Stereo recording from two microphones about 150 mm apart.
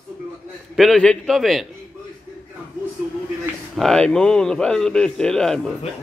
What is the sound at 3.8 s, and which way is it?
A man's voice, 5° left (ahead or behind).